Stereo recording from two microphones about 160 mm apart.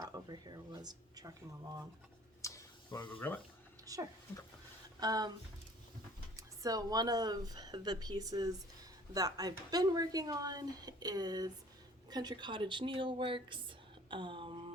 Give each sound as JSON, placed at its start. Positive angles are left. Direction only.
{"t": 0.0, "sound": "speech", "side_deg": -25}
{"t": 2.4, "sound": "tick", "side_deg": 20}
{"t": 3.2, "sound": "speech", "side_deg": 10}
{"t": 3.8, "sound": "speech", "side_deg": -20}
{"t": 6.3, "sound": "speech", "side_deg": -20}